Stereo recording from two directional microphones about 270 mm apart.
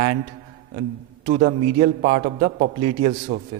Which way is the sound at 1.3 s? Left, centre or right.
Right.